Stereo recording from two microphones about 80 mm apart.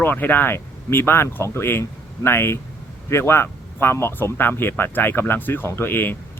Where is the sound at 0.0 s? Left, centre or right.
Left.